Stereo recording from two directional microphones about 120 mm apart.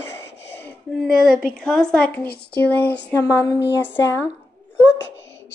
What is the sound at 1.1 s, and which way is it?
Speech, 5° left (ahead or behind).